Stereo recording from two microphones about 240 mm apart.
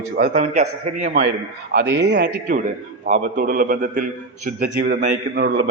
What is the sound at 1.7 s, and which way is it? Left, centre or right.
Speech, right.